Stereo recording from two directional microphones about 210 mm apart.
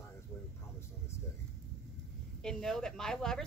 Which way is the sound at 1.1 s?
15° left (ahead or behind).